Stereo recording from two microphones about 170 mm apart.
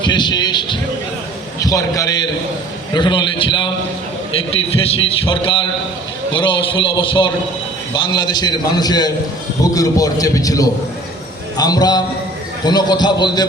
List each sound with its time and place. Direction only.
0.0 s a man's voice: 25° left (ahead or behind)